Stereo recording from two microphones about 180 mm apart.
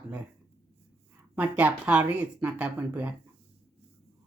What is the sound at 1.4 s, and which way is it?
Speech, 10° right (ahead or behind).